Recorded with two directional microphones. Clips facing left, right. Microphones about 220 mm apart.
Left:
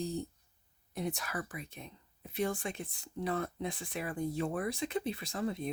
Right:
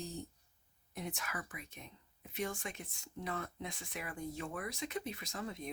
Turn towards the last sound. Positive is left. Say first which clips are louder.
# left 7 dB
turn(degrees=30)  # may be behind; listen again after turning